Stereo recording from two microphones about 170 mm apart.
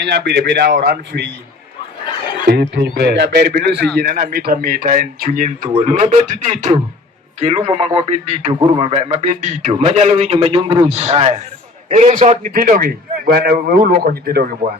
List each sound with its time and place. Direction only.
0.0 s a man's voice: 80° right
2.4 s a man's voice: 65° right (ahead or behind)
3.9 s a man's voice: 55° right (ahead or behind)
8.5 s a man's voice: 30° right (ahead or behind)
12.5 s a man's voice: 55° right (ahead or behind)